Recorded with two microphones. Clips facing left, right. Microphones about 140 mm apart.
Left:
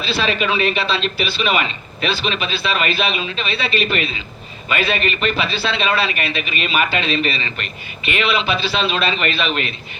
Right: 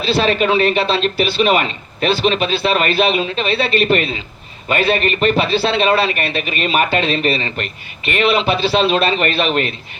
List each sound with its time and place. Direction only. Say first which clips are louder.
0.0 s a man's voice: right 5 dB; 50° right (ahead or behind)
4.7 s a man's voice: right 4 dB; 45° right (ahead or behind)
5.4 s a man's voice: right 6 dB; 55° right (ahead or behind)